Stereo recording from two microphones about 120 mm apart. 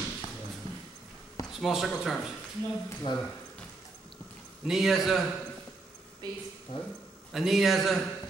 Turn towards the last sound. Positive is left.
turn(degrees=0)  # may be behind; listen again after turning